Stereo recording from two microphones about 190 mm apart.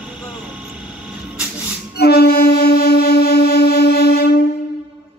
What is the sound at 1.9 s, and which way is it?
Music, 55° left (ahead or behind).